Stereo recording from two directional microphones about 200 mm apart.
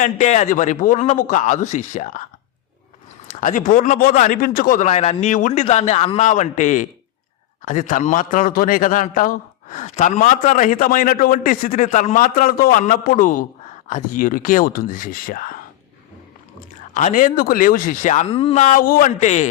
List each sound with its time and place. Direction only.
0.0 s a man's voice: 35° left (ahead or behind)
3.2 s a man's voice: 40° left (ahead or behind)